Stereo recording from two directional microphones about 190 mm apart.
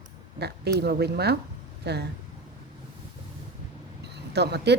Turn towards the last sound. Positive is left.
turn(degrees=-60)  # may be behind; listen again after turning